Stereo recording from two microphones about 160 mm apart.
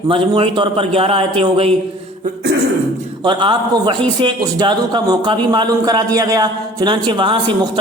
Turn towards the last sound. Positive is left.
turn(degrees=-30)  # may be behind; listen again after turning